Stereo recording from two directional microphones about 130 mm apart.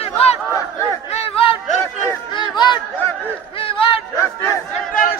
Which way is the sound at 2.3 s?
35° left (ahead or behind).